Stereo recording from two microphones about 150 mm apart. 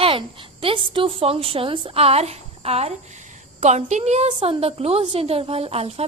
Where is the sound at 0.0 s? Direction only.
35° right (ahead or behind).